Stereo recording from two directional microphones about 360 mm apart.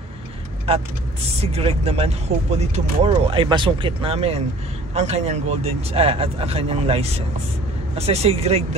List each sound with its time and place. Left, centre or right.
1.4 s speech: centre